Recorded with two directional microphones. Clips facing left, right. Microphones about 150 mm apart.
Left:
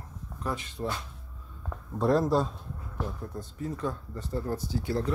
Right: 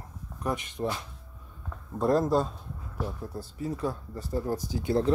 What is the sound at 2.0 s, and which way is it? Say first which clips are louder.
Speech: even; centre (ahead or behind).